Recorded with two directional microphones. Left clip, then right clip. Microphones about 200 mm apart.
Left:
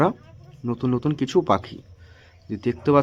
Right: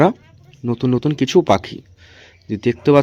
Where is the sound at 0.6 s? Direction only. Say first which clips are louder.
Right 6 dB; 25° right (ahead or behind).